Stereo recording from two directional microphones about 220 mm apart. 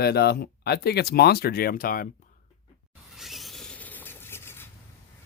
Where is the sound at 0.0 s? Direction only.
45° left (ahead or behind).